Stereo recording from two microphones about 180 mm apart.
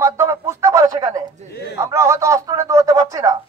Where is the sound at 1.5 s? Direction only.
65° left (ahead or behind).